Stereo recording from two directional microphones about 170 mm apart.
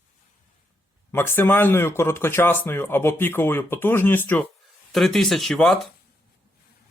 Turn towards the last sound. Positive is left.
turn(degrees=5)  # may be behind; listen again after turning